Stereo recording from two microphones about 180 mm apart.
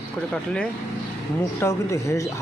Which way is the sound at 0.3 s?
5° left (ahead or behind).